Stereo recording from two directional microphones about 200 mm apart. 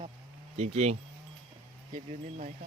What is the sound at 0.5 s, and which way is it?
Speech, 35° right (ahead or behind).